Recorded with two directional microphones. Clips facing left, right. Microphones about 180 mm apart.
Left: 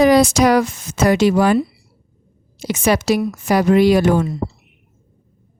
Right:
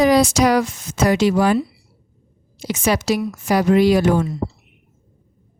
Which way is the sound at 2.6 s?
60° left (ahead or behind).